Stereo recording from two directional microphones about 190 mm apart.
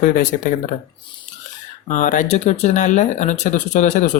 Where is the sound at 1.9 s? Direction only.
45° left (ahead or behind).